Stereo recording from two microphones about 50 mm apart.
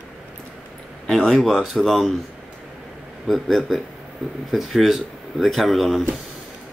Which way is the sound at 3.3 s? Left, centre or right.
Centre.